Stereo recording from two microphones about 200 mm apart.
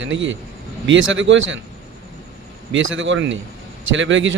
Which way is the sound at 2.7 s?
70° right (ahead or behind).